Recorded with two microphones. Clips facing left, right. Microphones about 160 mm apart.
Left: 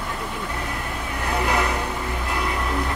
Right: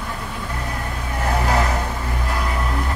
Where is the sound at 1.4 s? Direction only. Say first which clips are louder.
Right 1 dB; 35° right (ahead or behind).